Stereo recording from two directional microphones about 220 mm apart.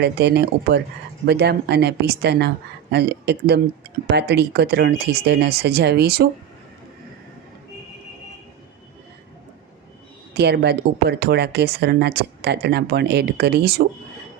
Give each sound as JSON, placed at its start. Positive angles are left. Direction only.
{"t": 0.0, "sound": "speech", "side_deg": -50}
{"t": 10.3, "sound": "speech", "side_deg": -50}